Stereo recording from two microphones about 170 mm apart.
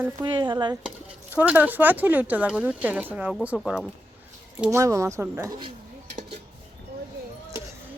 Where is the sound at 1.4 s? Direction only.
10° right (ahead or behind).